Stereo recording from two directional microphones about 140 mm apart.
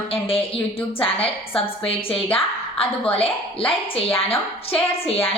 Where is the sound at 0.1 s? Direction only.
40° left (ahead or behind).